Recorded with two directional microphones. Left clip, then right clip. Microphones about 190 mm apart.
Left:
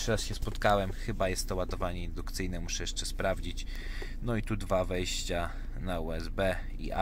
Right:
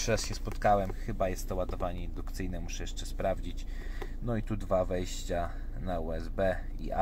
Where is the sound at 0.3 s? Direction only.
20° left (ahead or behind).